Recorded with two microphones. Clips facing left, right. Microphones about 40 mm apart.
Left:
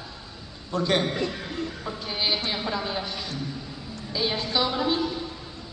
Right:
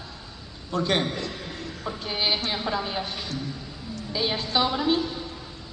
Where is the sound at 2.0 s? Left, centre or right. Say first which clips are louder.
Right 1 dB; centre.